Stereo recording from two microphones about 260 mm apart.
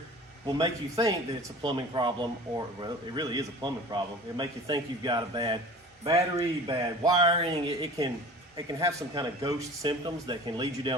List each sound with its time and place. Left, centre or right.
0.4 s a man's voice: centre